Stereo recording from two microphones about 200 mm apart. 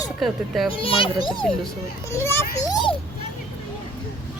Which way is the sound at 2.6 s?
20° left (ahead or behind).